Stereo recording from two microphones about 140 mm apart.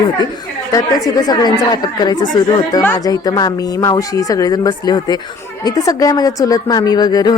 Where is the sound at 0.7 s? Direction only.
25° left (ahead or behind).